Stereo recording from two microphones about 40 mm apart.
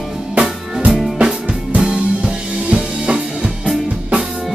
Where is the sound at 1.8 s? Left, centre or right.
Right.